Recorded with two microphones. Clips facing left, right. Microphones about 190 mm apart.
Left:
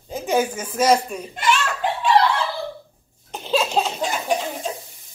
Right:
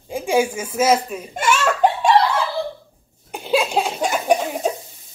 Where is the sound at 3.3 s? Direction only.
10° right (ahead or behind).